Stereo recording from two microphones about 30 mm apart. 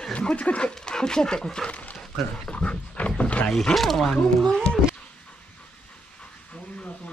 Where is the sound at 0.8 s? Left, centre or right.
Left.